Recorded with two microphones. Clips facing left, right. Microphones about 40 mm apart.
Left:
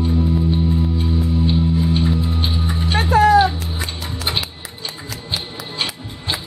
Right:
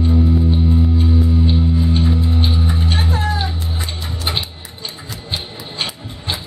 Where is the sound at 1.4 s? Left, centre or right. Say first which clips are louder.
Even; centre.